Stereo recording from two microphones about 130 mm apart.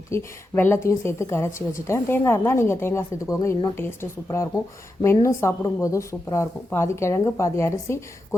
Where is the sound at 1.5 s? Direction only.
90° left.